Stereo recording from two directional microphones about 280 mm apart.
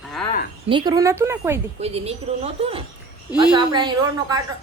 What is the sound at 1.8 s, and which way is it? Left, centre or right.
A woman's voice, right.